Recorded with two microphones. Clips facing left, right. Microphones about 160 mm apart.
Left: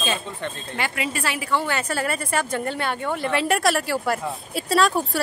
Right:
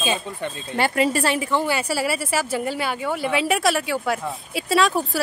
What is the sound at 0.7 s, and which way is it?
Speech, 35° right (ahead or behind).